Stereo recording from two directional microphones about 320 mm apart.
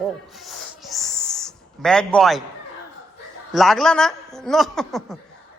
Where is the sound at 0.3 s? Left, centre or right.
Centre.